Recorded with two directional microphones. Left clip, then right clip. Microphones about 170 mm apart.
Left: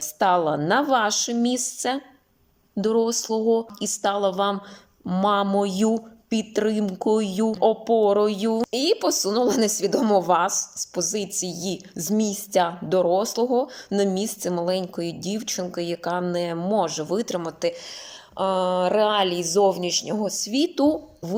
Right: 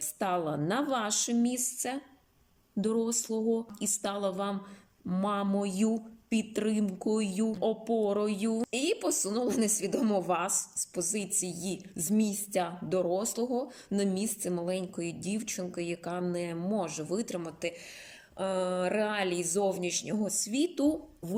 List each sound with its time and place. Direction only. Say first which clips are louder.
0.0 s a woman's voice: left 11 dB; 15° right (ahead or behind)
18.3 s a sound: left 9 dB; 45° left (ahead or behind)
20.5 s a woman's voice: left 8 dB; 15° right (ahead or behind)